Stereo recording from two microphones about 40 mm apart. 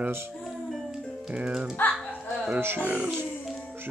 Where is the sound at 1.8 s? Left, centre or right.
Left.